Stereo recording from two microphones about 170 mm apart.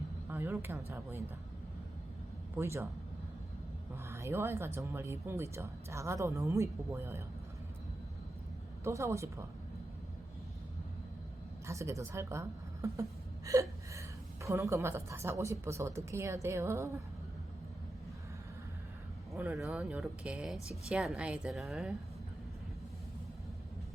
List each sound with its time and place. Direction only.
0.3 s speech: 15° right (ahead or behind)
2.6 s speech: 15° right (ahead or behind)
4.1 s speech: 15° right (ahead or behind)
8.8 s speech: 15° right (ahead or behind)
11.6 s a woman's voice: 15° right (ahead or behind)
19.3 s speech: 15° right (ahead or behind)